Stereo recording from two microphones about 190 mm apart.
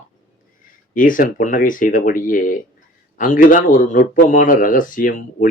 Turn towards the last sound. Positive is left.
turn(degrees=45)  # may be behind; listen again after turning